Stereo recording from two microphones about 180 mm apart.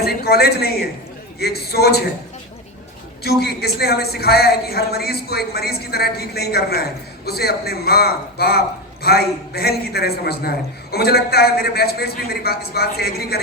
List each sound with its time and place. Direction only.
0.0 s a woman's voice: 60° left (ahead or behind)
3.2 s speech: 60° left (ahead or behind)